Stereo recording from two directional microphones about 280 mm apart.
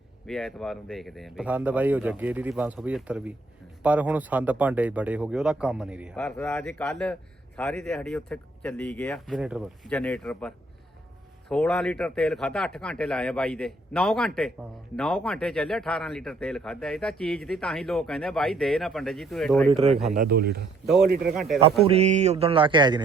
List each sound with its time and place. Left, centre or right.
0.3 s speech: centre
19.7 s speech: right
20.1 s speech: right
20.8 s speech: centre
21.8 s speech: right